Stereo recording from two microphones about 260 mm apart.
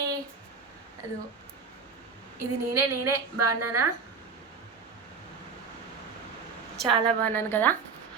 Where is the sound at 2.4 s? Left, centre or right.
Right.